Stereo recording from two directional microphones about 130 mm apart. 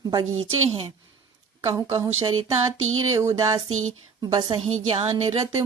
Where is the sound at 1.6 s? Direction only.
25° right (ahead or behind).